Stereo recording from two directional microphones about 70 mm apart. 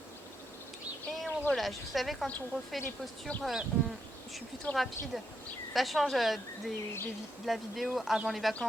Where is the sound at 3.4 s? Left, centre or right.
Centre.